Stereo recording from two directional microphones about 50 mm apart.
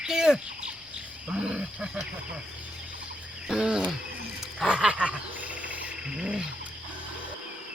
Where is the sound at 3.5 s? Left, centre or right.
Centre.